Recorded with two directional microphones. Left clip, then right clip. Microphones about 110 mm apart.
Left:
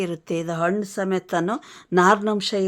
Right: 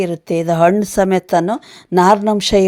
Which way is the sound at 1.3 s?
40° right (ahead or behind).